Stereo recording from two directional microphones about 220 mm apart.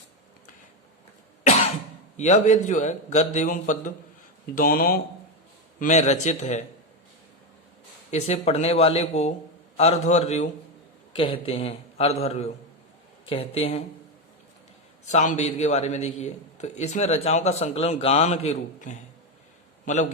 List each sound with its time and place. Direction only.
2.1 s a man's voice: 30° left (ahead or behind)
5.8 s a man's voice: 30° left (ahead or behind)
8.1 s a man's voice: 30° left (ahead or behind)
15.0 s a man's voice: 35° left (ahead or behind)